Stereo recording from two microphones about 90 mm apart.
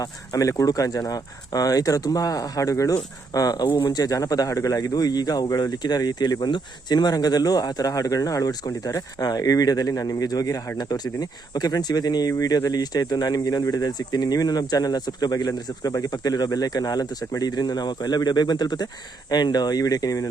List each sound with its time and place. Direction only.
0.0 s a man's voice: 40° left (ahead or behind)